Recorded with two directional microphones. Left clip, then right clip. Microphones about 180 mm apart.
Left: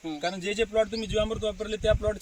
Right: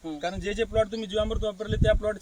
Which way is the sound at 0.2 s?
5° left (ahead or behind).